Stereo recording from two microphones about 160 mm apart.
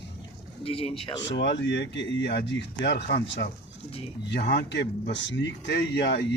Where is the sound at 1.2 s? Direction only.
90° left.